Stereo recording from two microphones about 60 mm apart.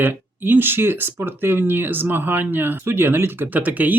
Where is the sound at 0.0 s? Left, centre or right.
Right.